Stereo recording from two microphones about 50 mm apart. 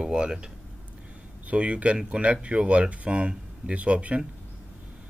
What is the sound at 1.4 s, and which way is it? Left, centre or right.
Speech, right.